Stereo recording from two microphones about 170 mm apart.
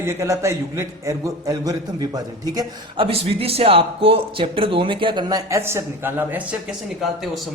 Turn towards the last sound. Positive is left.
turn(degrees=0)  # may be behind; listen again after turning